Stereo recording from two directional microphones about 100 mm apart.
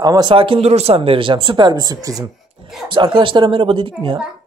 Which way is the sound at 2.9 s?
55° right (ahead or behind).